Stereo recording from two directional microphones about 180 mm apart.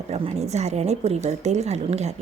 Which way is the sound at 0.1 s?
35° right (ahead or behind).